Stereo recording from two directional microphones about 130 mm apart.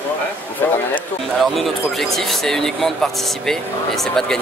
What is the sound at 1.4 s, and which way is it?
Speech, centre (ahead or behind).